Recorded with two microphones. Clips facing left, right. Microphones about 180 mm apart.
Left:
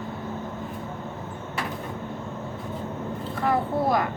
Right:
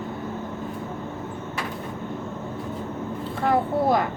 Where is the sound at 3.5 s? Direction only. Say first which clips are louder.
Right 2 dB; 25° right (ahead or behind).